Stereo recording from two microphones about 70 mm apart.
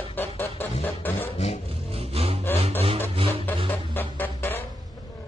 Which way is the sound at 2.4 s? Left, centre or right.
Left.